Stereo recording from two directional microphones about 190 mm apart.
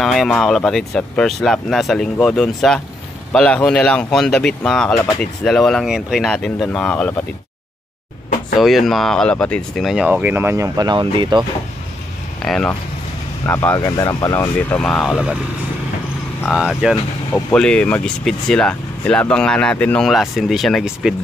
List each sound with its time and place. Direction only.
0.0 s speech: centre (ahead or behind)
4.9 s speech: 15° left (ahead or behind)
5.2 s speech: 5° left (ahead or behind)
8.5 s speech: centre (ahead or behind); by 11.4 s 25° right (ahead or behind)
12.4 s speech: 5° left (ahead or behind)
16.4 s speech: centre (ahead or behind)